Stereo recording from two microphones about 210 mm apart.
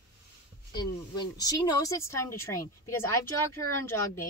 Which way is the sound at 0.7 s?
20° left (ahead or behind).